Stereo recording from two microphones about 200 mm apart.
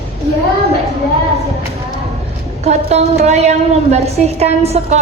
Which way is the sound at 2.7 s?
35° right (ahead or behind).